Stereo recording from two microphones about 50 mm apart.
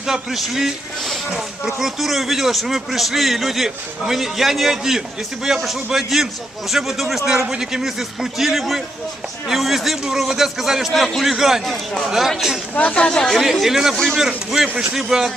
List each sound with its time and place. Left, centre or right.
0.0 s a man's voice: centre
12.7 s speech: left
13.1 s speech: centre
13.4 s a man's voice: centre
13.9 s speech: centre
14.2 s a man's voice: centre